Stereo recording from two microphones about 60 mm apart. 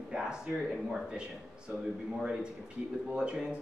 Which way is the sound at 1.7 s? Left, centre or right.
Right.